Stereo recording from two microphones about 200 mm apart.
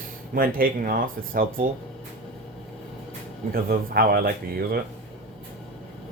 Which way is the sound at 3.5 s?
45° right (ahead or behind).